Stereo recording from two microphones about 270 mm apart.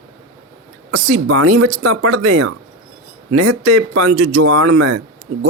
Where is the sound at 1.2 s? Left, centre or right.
Right.